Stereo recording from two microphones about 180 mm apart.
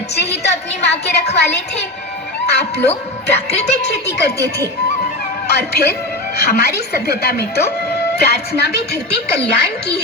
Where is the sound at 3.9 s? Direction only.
65° left (ahead or behind).